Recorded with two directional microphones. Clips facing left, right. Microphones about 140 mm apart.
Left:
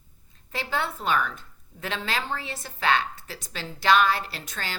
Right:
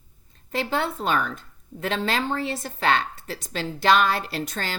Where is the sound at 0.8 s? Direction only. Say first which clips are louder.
Even; 30° right (ahead or behind).